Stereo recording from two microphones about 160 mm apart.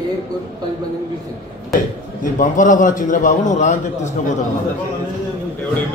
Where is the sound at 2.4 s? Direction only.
55° left (ahead or behind).